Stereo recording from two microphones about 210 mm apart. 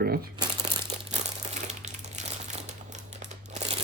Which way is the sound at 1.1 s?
35° right (ahead or behind).